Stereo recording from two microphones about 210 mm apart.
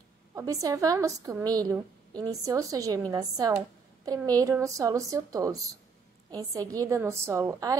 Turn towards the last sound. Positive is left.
turn(degrees=-15)  # may be behind; listen again after turning